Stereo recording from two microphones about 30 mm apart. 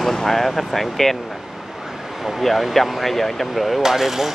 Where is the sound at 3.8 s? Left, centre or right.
Centre.